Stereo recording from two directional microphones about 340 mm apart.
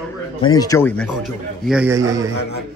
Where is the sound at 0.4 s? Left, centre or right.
Centre.